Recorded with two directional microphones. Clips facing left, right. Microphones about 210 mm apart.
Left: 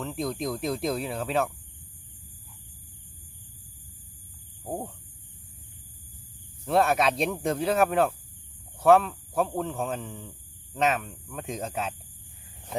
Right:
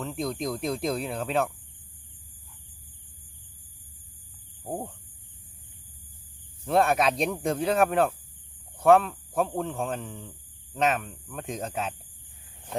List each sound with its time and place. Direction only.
0.0 s speech: centre (ahead or behind)
4.6 s speech: centre (ahead or behind)
6.7 s speech: centre (ahead or behind)